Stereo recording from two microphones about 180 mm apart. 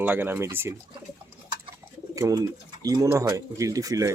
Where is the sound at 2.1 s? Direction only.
20° right (ahead or behind).